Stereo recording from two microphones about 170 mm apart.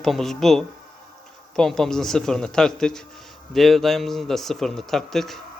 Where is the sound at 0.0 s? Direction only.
Centre (ahead or behind).